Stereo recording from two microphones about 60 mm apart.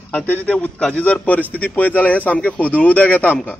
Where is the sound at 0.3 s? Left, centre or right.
Left.